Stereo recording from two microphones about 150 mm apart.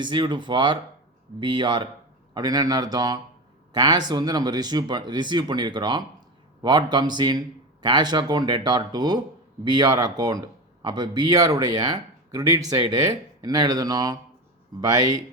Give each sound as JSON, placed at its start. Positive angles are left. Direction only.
{"t": 0.0, "sound": "speech", "side_deg": -30}